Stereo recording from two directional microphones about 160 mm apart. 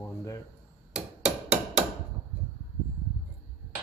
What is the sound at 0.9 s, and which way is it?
Hammer, 10° right (ahead or behind).